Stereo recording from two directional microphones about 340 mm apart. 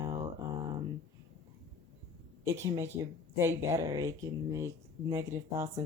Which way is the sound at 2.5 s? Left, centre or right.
Centre.